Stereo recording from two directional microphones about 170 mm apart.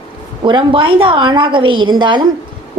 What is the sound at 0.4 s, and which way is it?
A woman's voice, 30° right (ahead or behind).